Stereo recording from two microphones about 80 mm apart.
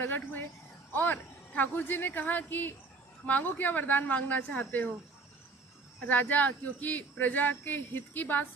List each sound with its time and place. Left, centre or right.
0.0 s speech: left
6.0 s speech: left